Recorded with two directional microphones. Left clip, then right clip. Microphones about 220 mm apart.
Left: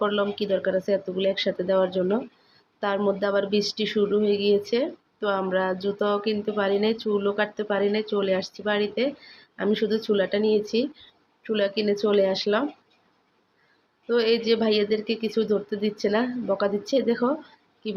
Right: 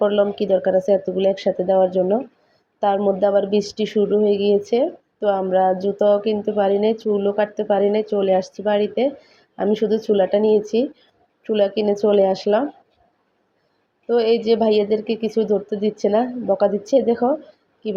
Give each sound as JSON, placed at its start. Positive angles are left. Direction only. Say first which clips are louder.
{"t": 0.0, "sound": "speech", "louder": "right 7 dB", "side_deg": -15}
{"t": 14.1, "sound": "speech", "louder": "right 5 dB", "side_deg": -15}